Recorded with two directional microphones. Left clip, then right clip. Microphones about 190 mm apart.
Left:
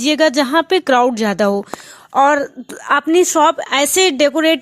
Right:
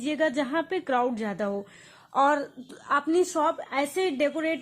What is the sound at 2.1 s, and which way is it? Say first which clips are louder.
A woman's voice: left 10 dB; 30° left (ahead or behind).